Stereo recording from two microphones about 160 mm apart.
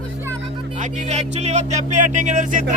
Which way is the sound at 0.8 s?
45° right (ahead or behind).